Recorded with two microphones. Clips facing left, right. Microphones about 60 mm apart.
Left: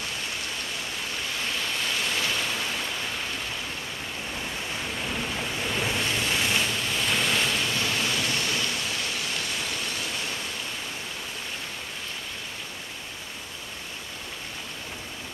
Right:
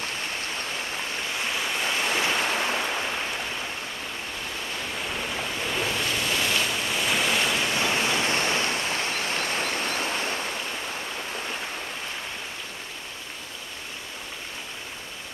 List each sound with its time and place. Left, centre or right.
1.4 s waves: centre; by 2.8 s right
5.0 s waves: centre
6.7 s waves: centre
7.6 s waves: right